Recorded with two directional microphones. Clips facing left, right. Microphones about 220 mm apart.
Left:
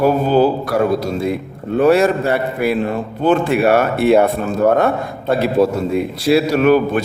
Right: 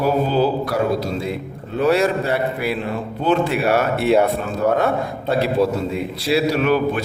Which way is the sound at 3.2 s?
55° left (ahead or behind).